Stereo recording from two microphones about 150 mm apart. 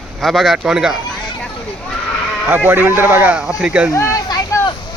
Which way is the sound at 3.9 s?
20° left (ahead or behind).